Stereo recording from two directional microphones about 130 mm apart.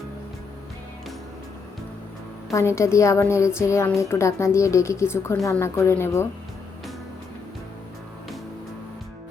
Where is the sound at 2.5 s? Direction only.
20° left (ahead or behind).